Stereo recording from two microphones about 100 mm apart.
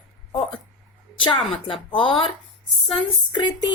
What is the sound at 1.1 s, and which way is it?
A woman's voice, 55° left (ahead or behind).